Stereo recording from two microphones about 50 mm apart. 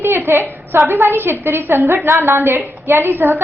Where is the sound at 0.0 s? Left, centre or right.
Right.